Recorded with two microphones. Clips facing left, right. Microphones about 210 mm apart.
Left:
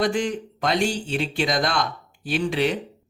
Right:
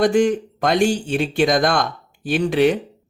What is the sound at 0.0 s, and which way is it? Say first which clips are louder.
Speech: right 7 dB; 45° right (ahead or behind).